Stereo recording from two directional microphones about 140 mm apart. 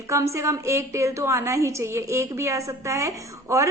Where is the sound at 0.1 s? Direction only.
20° right (ahead or behind).